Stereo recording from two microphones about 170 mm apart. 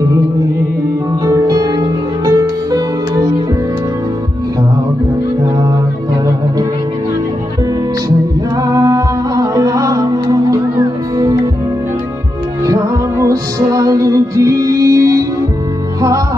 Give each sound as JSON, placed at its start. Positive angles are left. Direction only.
{"t": 1.2, "sound": "music", "side_deg": -20}
{"t": 8.6, "sound": "music", "side_deg": -20}
{"t": 13.2, "sound": "music", "side_deg": -20}